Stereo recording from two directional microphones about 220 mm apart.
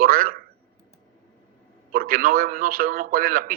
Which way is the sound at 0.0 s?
40° right (ahead or behind).